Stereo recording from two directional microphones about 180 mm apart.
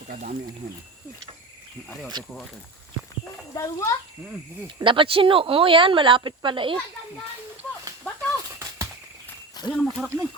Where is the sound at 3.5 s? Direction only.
20° left (ahead or behind).